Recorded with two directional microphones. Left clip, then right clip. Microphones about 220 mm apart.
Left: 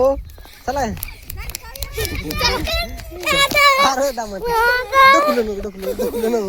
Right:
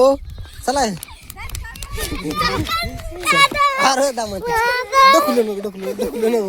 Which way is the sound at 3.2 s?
15° right (ahead or behind).